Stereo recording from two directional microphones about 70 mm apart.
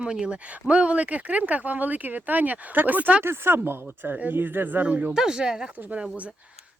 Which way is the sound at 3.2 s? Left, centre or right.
Right.